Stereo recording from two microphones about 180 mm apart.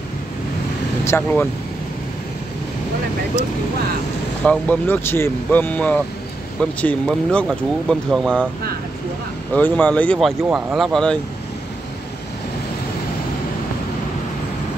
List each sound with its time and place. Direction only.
1.0 s speech: 10° left (ahead or behind)
4.5 s speech: 10° left (ahead or behind)
9.5 s speech: 10° left (ahead or behind)